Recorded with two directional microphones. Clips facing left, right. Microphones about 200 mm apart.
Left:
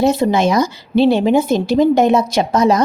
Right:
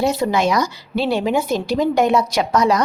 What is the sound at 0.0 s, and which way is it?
A woman's voice, 25° left (ahead or behind).